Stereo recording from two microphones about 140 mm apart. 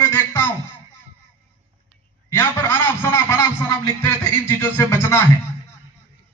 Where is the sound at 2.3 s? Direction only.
15° left (ahead or behind).